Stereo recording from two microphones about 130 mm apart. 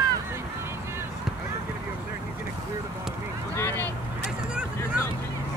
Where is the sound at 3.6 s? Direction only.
20° left (ahead or behind).